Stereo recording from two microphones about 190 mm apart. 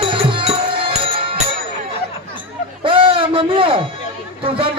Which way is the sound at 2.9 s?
25° right (ahead or behind).